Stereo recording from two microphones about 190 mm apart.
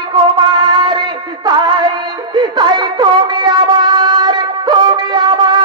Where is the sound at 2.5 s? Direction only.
25° right (ahead or behind).